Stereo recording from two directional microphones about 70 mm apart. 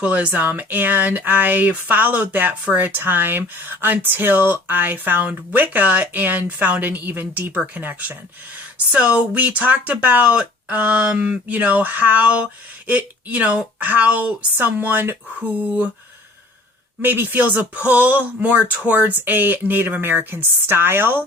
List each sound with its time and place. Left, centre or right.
0.0 s speech: centre
17.0 s speech: right